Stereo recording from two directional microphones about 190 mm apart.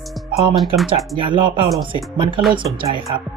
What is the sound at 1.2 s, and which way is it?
Speech, 25° right (ahead or behind).